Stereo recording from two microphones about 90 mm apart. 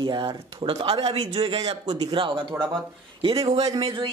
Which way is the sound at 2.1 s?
65° right (ahead or behind).